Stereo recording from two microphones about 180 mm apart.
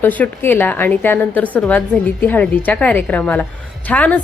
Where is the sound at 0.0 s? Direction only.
10° left (ahead or behind).